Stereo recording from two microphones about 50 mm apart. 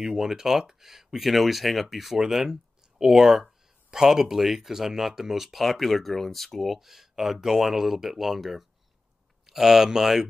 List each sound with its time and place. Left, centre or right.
0.0 s speech: centre